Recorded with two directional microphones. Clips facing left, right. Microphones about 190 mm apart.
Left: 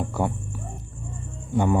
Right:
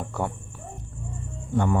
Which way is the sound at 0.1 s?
5° left (ahead or behind).